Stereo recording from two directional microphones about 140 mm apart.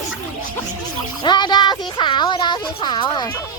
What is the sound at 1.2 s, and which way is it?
Speech, 30° left (ahead or behind).